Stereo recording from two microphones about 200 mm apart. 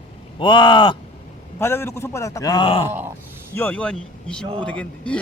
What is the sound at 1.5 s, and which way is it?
Speech, 10° left (ahead or behind).